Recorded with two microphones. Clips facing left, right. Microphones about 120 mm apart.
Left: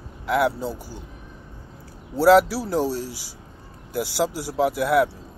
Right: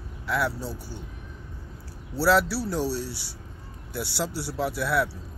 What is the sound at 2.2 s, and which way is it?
Speech, 50° left (ahead or behind).